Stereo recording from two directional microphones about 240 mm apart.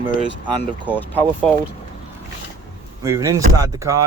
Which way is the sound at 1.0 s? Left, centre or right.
Centre.